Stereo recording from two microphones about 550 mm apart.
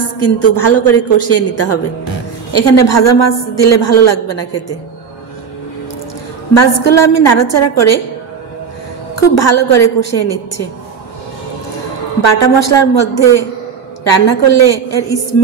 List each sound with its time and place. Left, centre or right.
0.2 s a woman's voice: left
6.5 s a woman's voice: left
9.1 s a woman's voice: left
12.4 s a woman's voice: left
14.5 s a woman's voice: left